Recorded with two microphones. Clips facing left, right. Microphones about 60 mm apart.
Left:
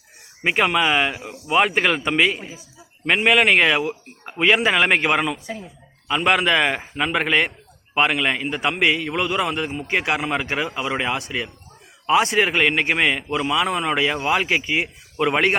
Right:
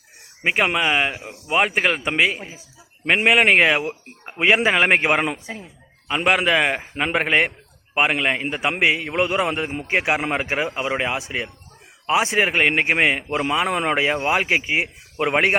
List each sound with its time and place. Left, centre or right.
0.4 s a man's voice: centre
5.2 s a man's voice: right
6.2 s a man's voice: centre
6.9 s a man's voice: right
10.2 s a man's voice: right
10.4 s a man's voice: right
13.4 s a man's voice: right
14.0 s speech: right